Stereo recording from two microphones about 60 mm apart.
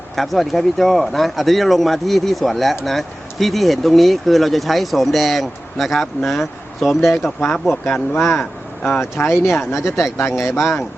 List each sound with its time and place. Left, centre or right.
0.2 s speech: centre
7.3 s speech: centre
7.9 s speech: left